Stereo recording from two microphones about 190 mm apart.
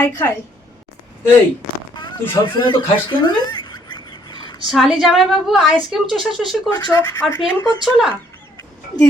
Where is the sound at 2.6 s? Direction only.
25° left (ahead or behind).